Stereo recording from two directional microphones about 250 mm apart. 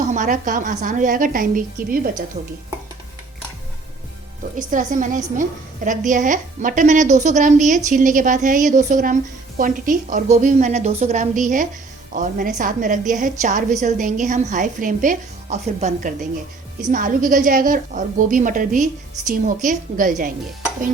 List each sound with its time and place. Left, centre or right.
0.1 s a woman's voice: right
4.5 s a woman's voice: right